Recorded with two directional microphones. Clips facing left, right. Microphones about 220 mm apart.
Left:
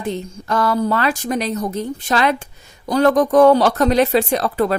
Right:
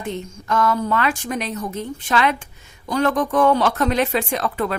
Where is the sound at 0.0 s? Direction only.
35° left (ahead or behind).